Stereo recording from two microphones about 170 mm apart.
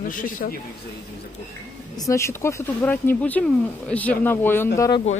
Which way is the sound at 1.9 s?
20° left (ahead or behind).